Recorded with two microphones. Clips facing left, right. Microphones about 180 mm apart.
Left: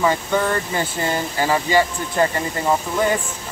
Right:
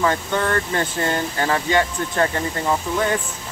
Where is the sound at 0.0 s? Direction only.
10° left (ahead or behind).